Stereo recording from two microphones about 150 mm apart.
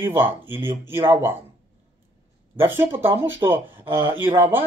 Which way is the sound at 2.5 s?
15° right (ahead or behind).